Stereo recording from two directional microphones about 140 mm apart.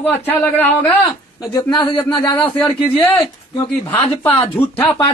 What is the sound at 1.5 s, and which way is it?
Speech, 30° left (ahead or behind).